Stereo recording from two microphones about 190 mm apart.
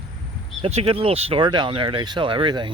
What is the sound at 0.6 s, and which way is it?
Speech, 30° right (ahead or behind).